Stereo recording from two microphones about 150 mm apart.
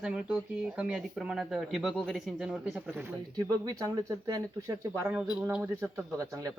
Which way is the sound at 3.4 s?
20° right (ahead or behind).